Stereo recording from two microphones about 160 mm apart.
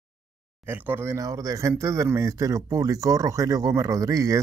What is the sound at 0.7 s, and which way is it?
Speech, 15° right (ahead or behind).